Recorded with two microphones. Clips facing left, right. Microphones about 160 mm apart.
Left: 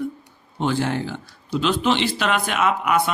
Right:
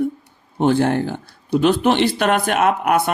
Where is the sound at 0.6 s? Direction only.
55° right (ahead or behind).